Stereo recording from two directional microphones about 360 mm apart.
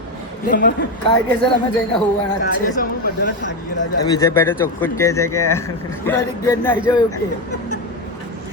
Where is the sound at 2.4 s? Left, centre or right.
Left.